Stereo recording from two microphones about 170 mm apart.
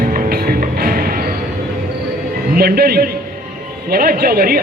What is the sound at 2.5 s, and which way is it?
Speech, 60° right (ahead or behind).